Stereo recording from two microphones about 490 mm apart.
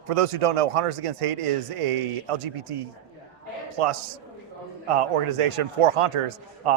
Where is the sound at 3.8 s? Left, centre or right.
Right.